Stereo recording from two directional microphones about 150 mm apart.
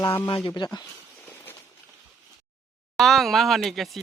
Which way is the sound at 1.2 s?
15° left (ahead or behind).